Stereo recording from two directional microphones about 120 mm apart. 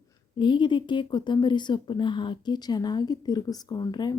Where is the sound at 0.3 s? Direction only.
40° left (ahead or behind).